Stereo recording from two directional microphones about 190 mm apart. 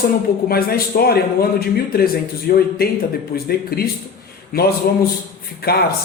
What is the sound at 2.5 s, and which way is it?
Speech, 55° left (ahead or behind).